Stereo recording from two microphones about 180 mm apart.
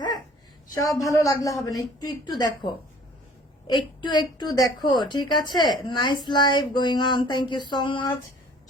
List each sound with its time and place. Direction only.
0.9 s speech: 15° left (ahead or behind)